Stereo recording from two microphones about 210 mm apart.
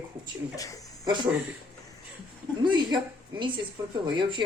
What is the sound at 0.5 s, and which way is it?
Speech, 15° left (ahead or behind).